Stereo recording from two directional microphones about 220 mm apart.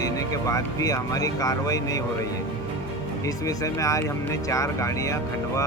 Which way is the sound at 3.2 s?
15° left (ahead or behind).